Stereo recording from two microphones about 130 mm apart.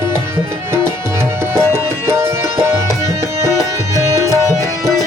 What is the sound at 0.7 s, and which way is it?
Tabla, 20° right (ahead or behind).